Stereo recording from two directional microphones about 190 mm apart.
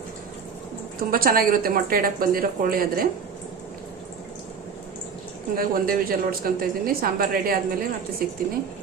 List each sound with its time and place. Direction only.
1.1 s a woman's voice: 50° right (ahead or behind)
5.5 s a woman's voice: 50° right (ahead or behind)